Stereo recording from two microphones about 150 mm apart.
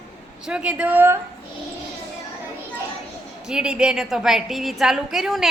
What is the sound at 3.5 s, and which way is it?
A woman's voice, 5° right (ahead or behind).